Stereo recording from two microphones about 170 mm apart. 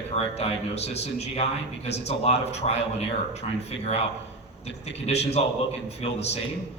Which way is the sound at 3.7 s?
40° left (ahead or behind).